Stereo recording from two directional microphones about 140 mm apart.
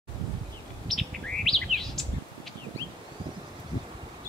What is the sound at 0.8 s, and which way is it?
Bird, centre (ahead or behind).